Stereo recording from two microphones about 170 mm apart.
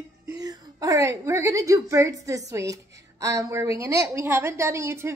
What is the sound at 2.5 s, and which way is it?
A woman's voice, 20° right (ahead or behind).